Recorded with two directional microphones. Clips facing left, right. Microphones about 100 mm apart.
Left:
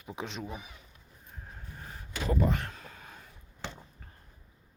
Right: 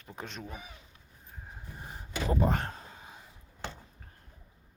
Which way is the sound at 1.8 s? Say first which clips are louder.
Right 2 dB; 25° right (ahead or behind).